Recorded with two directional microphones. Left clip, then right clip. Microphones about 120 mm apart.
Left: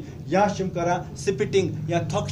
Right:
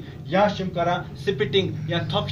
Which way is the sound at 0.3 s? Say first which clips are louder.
Right 1 dB; 30° left (ahead or behind).